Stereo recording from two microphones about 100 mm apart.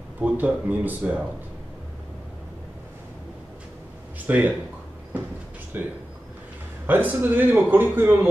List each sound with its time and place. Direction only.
0.2 s speech: 15° right (ahead or behind)
4.3 s speech: 15° right (ahead or behind)
5.7 s speech: 20° right (ahead or behind)